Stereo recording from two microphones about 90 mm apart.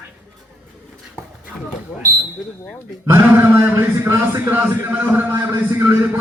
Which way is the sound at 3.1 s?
25° right (ahead or behind).